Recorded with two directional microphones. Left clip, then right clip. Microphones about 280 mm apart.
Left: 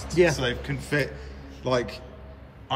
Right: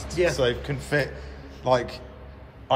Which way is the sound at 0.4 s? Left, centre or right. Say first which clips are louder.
Right 4 dB; centre.